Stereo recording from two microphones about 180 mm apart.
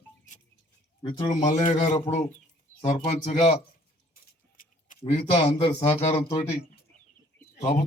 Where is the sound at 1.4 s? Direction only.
45° left (ahead or behind).